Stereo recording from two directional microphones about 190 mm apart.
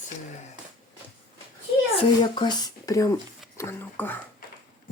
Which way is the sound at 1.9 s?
25° left (ahead or behind).